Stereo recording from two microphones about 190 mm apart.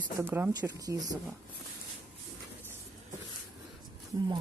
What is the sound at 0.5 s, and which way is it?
Speech, 20° right (ahead or behind).